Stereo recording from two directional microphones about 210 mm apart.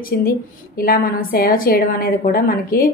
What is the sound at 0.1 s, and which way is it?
A woman's voice, 45° left (ahead or behind).